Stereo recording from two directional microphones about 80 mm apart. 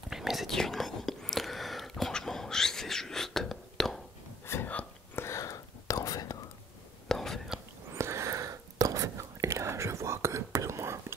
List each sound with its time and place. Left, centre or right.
0.1 s whispering: centre
4.6 s whispering: centre
5.2 s whispering: left
7.1 s whispering: centre
7.9 s whispering: right